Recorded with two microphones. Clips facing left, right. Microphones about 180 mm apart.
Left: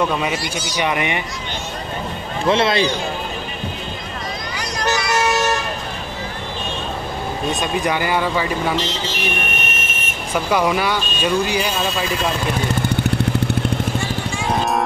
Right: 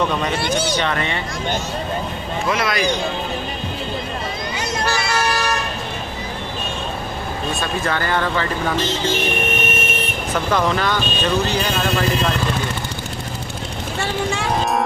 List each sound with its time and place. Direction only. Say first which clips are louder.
0.7 s speech: left 1 dB; 15° left (ahead or behind)
2.4 s speech: left 5 dB; 30° left (ahead or behind)
5.2 s vehicle: left 3 dB; 25° left (ahead or behind)
7.6 s speech: left 2 dB; 15° left (ahead or behind)
10.3 s speech: left 2 dB; 10° left (ahead or behind)